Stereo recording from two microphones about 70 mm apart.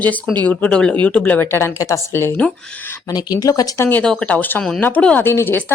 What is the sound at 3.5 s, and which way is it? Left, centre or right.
Speech, left.